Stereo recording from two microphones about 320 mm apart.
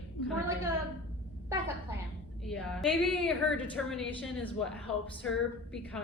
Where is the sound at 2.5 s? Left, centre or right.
Centre.